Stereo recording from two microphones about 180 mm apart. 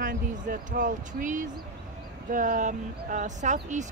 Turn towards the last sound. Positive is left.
turn(degrees=-40)  # may be behind; listen again after turning